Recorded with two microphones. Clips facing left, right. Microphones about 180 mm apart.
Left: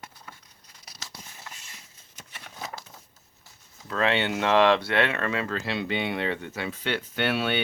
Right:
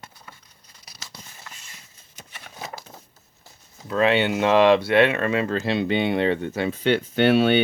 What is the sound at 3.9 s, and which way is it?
Speech, 10° right (ahead or behind).